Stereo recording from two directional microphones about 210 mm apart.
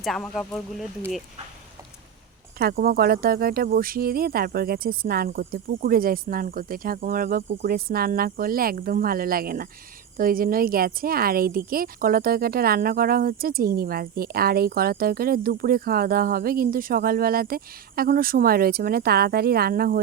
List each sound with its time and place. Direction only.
0.0 s speech: centre (ahead or behind)
2.6 s speech: 45° right (ahead or behind)